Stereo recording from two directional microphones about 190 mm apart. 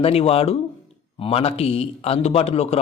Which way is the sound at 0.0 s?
30° left (ahead or behind).